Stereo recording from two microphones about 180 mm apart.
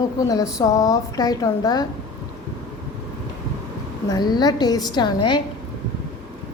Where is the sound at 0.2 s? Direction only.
20° left (ahead or behind).